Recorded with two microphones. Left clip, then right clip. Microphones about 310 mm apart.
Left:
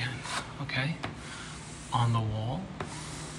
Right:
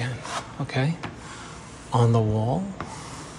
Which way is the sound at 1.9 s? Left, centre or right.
Centre.